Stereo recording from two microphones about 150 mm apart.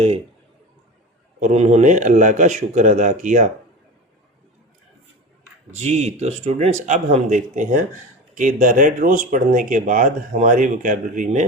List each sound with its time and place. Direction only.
1.4 s speech: 45° right (ahead or behind)
5.7 s speech: 45° right (ahead or behind)